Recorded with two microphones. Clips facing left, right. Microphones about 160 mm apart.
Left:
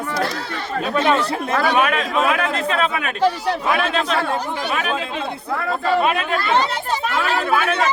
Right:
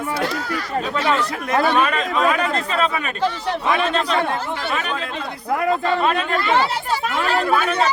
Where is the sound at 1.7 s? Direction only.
5° left (ahead or behind).